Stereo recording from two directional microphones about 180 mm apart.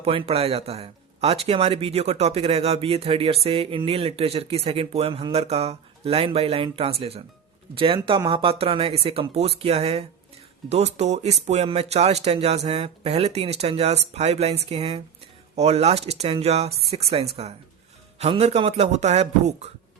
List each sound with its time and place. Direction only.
0.0 s speech: 30° right (ahead or behind)